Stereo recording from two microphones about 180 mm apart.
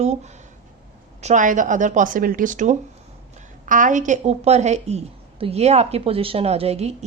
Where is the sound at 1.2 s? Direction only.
45° right (ahead or behind).